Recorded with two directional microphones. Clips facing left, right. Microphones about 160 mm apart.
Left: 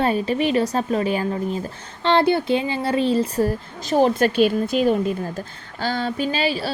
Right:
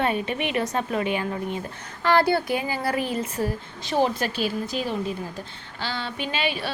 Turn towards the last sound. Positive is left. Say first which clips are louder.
# left 5 dB
turn(degrees=35)  # may be behind; listen again after turning